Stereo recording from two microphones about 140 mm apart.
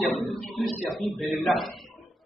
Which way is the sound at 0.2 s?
Centre (ahead or behind).